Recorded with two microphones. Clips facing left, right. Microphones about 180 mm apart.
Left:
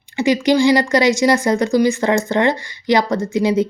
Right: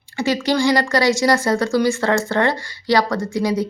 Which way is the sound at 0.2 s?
15° left (ahead or behind).